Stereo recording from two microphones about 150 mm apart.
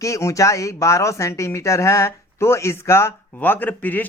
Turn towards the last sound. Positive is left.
turn(degrees=10)  # may be behind; listen again after turning